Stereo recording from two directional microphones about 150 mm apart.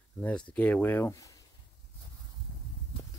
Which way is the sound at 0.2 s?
10° left (ahead or behind).